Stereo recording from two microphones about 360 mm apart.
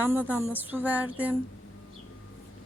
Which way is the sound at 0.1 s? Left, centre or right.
Centre.